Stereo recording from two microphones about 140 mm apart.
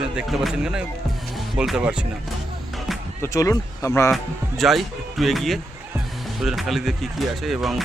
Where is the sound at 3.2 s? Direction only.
25° left (ahead or behind).